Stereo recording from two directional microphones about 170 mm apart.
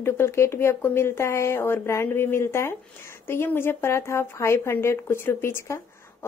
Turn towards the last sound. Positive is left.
turn(degrees=15)  # may be behind; listen again after turning